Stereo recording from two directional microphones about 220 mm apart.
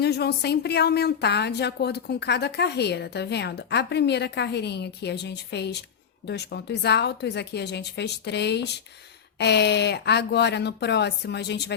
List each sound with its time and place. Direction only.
0.0 s a woman's voice: 45° left (ahead or behind)